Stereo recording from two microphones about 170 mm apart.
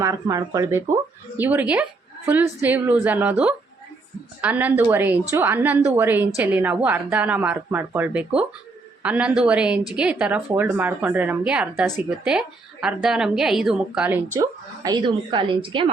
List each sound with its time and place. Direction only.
0.0 s a woman's voice: 20° right (ahead or behind)
14.8 s a woman's voice: 25° right (ahead or behind)